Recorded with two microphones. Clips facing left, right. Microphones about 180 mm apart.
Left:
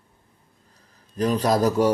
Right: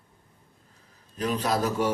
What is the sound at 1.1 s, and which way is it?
Speech, 40° left (ahead or behind).